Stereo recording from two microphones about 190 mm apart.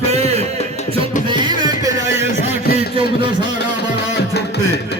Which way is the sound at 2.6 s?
55° left (ahead or behind).